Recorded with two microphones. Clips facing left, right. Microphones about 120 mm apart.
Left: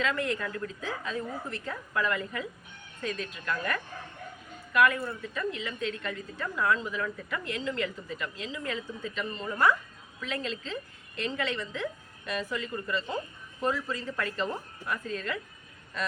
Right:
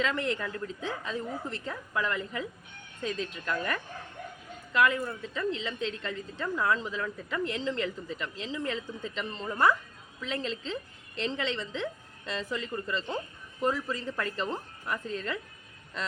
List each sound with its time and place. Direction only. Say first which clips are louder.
0.0 s a woman's voice: even; 25° right (ahead or behind)